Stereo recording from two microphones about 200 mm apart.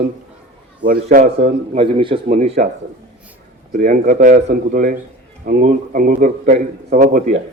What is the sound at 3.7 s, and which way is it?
A man's voice, 40° right (ahead or behind).